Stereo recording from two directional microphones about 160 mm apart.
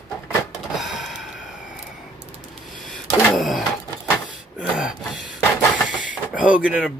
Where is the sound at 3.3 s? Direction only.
Centre (ahead or behind).